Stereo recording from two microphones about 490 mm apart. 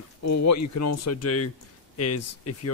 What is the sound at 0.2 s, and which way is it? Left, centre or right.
Speech, left.